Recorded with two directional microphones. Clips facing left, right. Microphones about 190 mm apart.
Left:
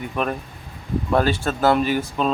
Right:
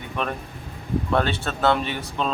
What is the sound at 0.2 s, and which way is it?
A man's voice, 5° left (ahead or behind).